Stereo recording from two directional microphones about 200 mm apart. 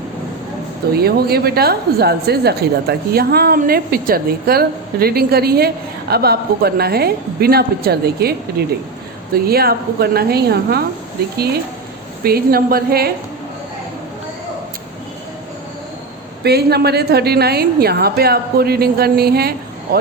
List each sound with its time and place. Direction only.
0.9 s a woman's voice: 50° right (ahead or behind)
16.4 s a woman's voice: 55° right (ahead or behind)